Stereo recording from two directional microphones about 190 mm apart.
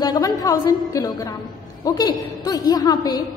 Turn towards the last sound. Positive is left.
turn(degrees=20)  # may be behind; listen again after turning